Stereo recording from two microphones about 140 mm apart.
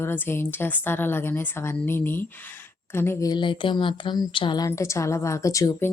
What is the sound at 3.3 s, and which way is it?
A woman's voice, 35° left (ahead or behind).